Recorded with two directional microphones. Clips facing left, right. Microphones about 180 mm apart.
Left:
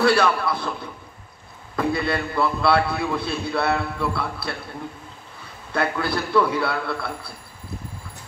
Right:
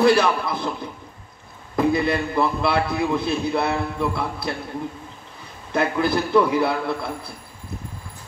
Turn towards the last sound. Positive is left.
turn(degrees=-20)  # may be behind; listen again after turning